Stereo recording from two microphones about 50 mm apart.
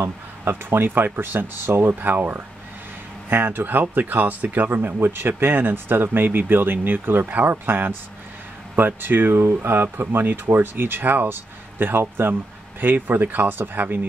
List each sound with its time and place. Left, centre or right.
0.0 s speech: right
4.9 s speech: right
9.3 s speech: right